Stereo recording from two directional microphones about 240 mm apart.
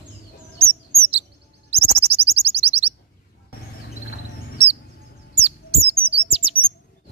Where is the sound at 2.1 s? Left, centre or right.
Right.